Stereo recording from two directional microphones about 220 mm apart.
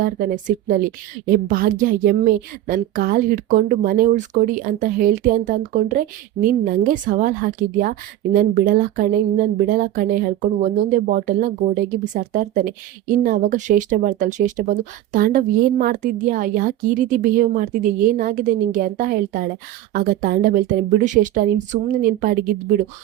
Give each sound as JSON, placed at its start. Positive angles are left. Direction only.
{"t": 0.0, "sound": "speech", "side_deg": -40}